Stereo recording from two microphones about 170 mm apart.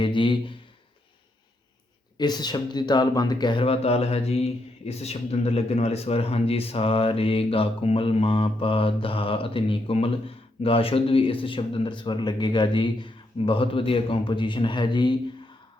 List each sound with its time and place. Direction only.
0.0 s speech: 30° left (ahead or behind)
2.1 s speech: 25° left (ahead or behind)